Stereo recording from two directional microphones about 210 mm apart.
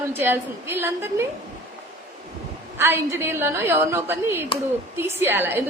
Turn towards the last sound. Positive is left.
turn(degrees=-10)  # may be behind; listen again after turning